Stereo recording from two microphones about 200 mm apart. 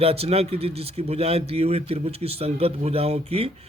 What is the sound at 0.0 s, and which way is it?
A man's voice, 30° right (ahead or behind).